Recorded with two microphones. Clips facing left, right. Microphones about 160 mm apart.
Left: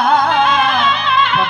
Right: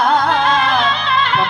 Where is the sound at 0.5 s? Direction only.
35° right (ahead or behind).